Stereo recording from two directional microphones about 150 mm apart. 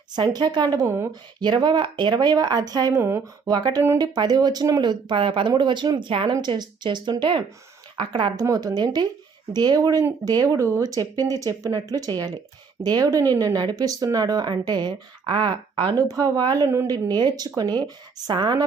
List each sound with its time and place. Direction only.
0.1 s speech: 30° right (ahead or behind)
1.4 s speech: 30° right (ahead or behind)